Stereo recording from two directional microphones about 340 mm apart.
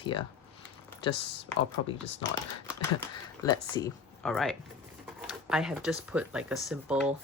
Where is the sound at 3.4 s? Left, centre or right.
Centre.